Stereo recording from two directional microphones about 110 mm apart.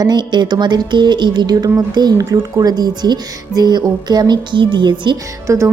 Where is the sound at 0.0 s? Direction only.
40° right (ahead or behind).